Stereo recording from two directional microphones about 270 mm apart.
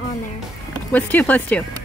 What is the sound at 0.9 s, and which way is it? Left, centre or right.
Speech, centre.